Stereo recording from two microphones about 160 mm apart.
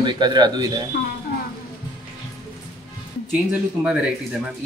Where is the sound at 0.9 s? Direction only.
80° left.